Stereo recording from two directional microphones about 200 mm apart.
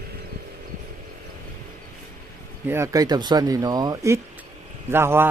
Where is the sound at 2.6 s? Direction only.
15° right (ahead or behind).